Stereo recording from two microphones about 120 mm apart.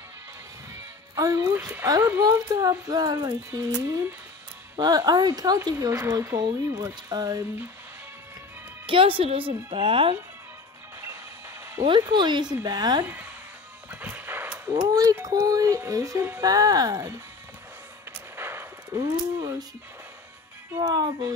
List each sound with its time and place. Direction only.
1.1 s speech: 30° right (ahead or behind)
1.6 s speech: 15° right (ahead or behind)
1.9 s speech: 25° right (ahead or behind)
4.7 s speech: 35° right (ahead or behind)
8.8 s a woman's voice: 45° right (ahead or behind)
11.8 s speech: 40° right (ahead or behind)
13.0 s speech: 15° right (ahead or behind)
13.8 s music: 15° right (ahead or behind)
14.7 s speech: 30° right (ahead or behind)
18.3 s a sound: 20° right (ahead or behind)
20.8 s speech: 35° right (ahead or behind)